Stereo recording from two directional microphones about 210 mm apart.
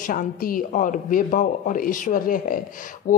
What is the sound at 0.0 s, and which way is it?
Speech, 40° left (ahead or behind).